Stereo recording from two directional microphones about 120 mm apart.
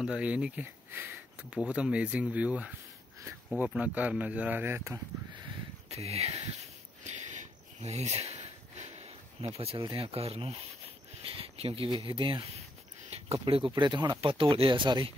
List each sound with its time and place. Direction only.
0.0 s speech: 10° right (ahead or behind)
5.9 s speech: 60° right (ahead or behind)
7.1 s a sound: 75° right (ahead or behind)
9.6 s speech: 55° right (ahead or behind)